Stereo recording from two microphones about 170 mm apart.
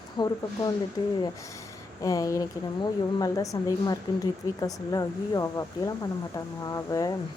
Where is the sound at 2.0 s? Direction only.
20° left (ahead or behind).